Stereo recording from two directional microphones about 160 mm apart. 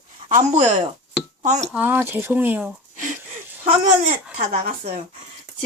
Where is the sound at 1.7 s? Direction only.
10° right (ahead or behind).